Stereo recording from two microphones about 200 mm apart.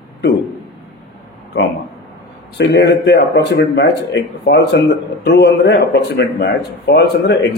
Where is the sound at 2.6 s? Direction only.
55° left (ahead or behind).